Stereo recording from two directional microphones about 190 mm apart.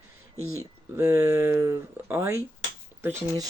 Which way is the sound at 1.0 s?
15° right (ahead or behind).